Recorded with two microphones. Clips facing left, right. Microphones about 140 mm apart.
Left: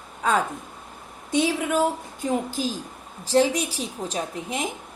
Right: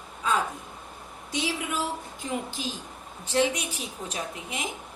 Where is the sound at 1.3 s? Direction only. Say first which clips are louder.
Left 8 dB; 50° left (ahead or behind).